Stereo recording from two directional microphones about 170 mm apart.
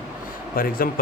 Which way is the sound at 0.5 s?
60° left (ahead or behind).